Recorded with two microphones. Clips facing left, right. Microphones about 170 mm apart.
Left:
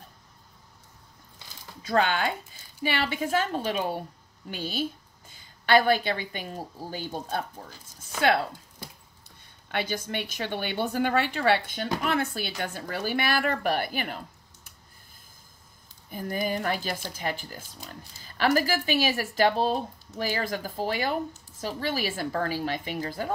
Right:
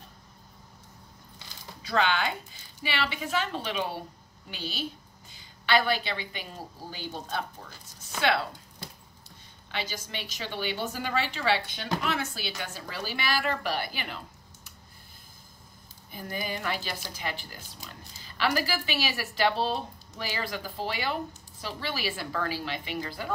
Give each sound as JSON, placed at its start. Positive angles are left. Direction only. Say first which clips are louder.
{"t": 1.8, "sound": "a woman's voice", "louder": "left 2 dB", "side_deg": 45}
{"t": 9.7, "sound": "speech", "louder": "left 6 dB", "side_deg": 55}
{"t": 16.1, "sound": "speech", "louder": "left 6 dB", "side_deg": 45}